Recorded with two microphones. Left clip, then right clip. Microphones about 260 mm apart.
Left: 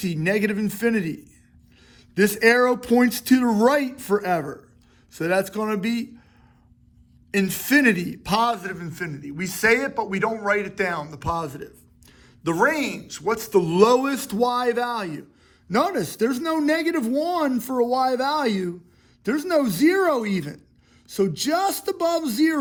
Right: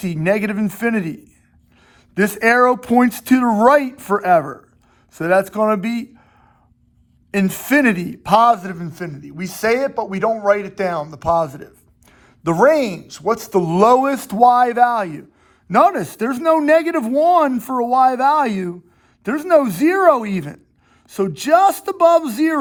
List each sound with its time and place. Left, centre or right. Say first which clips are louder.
0.0 s a man's voice: right 5 dB; right
7.3 s a man's voice: right 3 dB; centre